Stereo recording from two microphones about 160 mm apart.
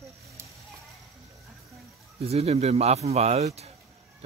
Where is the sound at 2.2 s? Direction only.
40° right (ahead or behind).